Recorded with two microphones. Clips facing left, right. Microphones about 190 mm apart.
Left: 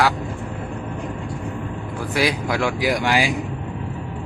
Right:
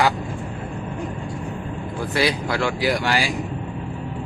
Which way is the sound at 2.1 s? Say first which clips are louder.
Left 1 dB; 10° left (ahead or behind).